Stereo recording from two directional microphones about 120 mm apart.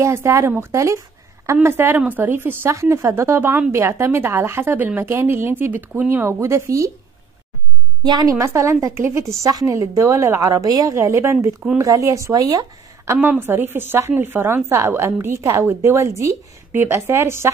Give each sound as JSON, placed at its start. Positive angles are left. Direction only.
{"t": 0.0, "sound": "a woman's voice", "side_deg": -20}
{"t": 8.0, "sound": "a woman's voice", "side_deg": -35}
{"t": 13.2, "sound": "a woman's voice", "side_deg": -15}